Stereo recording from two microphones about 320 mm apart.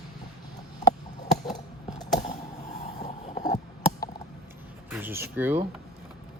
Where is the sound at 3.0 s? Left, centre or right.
Left.